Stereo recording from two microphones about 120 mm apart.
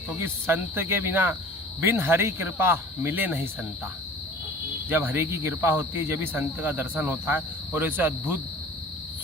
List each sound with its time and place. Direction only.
0.2 s speech: 20° right (ahead or behind)
4.9 s speech: 15° right (ahead or behind)